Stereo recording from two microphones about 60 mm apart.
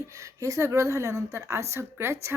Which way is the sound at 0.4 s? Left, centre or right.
Right.